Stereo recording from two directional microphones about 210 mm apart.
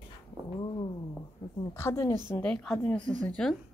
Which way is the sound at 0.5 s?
20° left (ahead or behind).